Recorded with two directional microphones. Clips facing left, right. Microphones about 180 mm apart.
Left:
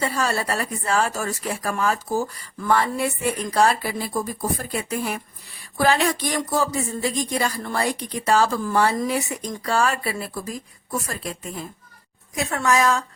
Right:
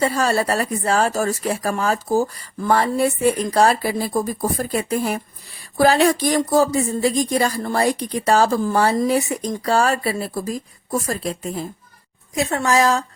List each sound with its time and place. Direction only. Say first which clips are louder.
0.0 s speech: right 5 dB; 35° right (ahead or behind)